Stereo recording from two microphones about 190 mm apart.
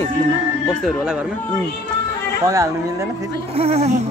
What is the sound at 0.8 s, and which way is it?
Speech, 5° right (ahead or behind).